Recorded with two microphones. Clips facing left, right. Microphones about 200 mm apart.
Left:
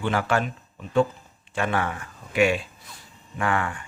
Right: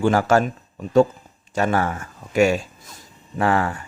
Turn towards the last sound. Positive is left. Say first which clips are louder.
# right 6 dB
turn(degrees=-40)  # may be behind; listen again after turning